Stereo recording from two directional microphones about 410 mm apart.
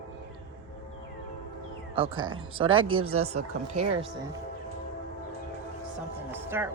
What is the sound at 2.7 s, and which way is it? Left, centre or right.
Speech, right.